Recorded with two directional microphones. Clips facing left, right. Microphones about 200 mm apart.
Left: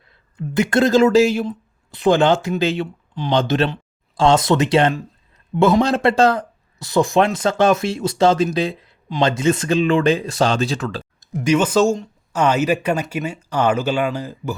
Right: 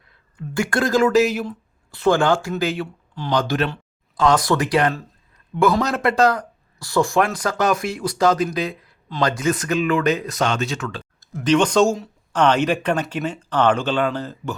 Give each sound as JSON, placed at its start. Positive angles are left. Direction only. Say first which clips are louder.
{"t": 0.1, "sound": "speech", "louder": "left 5 dB", "side_deg": 20}
{"t": 11.2, "sound": "speech", "louder": "even", "side_deg": 15}